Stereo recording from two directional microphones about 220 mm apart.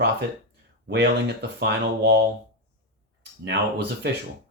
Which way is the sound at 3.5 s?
50° right (ahead or behind).